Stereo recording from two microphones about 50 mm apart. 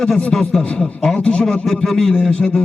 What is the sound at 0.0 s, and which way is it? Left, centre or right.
A man's voice, centre.